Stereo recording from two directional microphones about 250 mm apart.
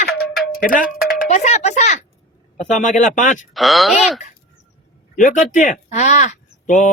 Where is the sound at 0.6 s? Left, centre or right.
Left.